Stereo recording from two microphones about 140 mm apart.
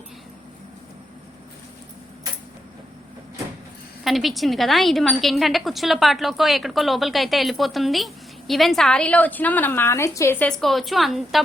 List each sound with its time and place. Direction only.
4.0 s a woman's voice: centre (ahead or behind); by 10.5 s 15° left (ahead or behind)
10.6 s a woman's voice: centre (ahead or behind)